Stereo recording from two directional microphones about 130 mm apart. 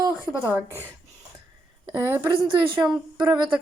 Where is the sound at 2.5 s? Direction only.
35° right (ahead or behind).